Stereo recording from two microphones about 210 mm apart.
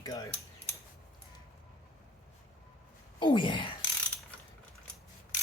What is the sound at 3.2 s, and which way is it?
Speech, 20° left (ahead or behind).